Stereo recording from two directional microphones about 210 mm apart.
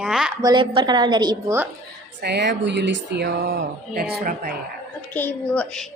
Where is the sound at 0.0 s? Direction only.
5° right (ahead or behind).